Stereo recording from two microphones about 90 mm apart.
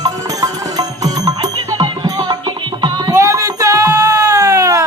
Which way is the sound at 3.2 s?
35° right (ahead or behind).